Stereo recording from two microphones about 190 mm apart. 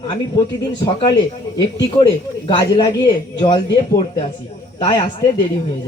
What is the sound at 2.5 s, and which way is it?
A man's voice, 25° left (ahead or behind).